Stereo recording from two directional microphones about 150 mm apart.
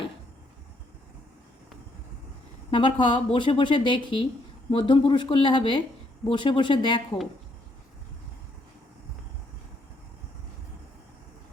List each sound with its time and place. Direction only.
2.6 s speech: 35° left (ahead or behind)